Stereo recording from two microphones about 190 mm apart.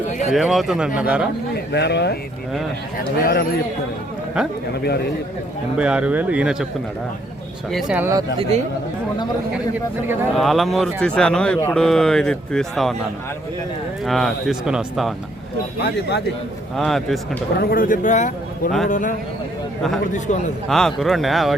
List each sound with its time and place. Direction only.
0.3 s speech: centre (ahead or behind)
1.7 s a man's voice: 65° left (ahead or behind)
4.4 s speech: 5° right (ahead or behind)
5.7 s speech: 5° right (ahead or behind)
7.7 s speech: 5° right (ahead or behind)
8.4 s speech: 35° right (ahead or behind)
10.3 s speech: centre (ahead or behind)
14.0 s speech: centre (ahead or behind)
15.8 s speech: 60° left (ahead or behind)
16.7 s speech: centre (ahead or behind)
17.6 s a man's voice: 50° left (ahead or behind)
20.1 s a man's voice: 40° left (ahead or behind)
20.7 s speech: centre (ahead or behind)